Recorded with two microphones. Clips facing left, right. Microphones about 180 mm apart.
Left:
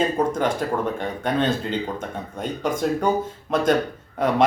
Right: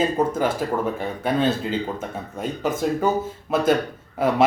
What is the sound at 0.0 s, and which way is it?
Speech, 5° right (ahead or behind).